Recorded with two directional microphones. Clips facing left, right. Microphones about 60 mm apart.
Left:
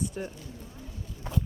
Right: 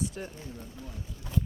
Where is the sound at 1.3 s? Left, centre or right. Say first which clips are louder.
Even; left.